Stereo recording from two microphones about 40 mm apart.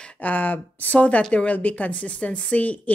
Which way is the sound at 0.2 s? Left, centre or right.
Left.